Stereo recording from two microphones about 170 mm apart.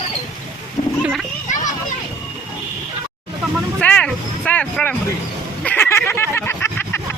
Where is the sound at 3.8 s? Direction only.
10° left (ahead or behind).